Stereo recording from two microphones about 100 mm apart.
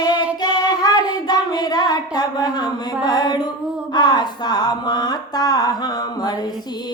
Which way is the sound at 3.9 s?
45° left (ahead or behind).